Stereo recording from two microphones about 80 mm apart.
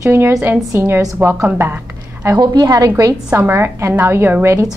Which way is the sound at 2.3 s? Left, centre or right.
Right.